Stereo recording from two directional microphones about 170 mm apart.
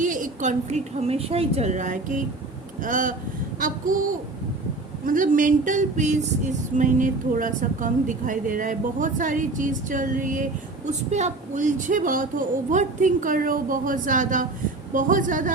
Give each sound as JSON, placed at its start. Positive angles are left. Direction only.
{"t": 0.0, "sound": "music", "side_deg": -50}
{"t": 5.0, "sound": "music", "side_deg": -50}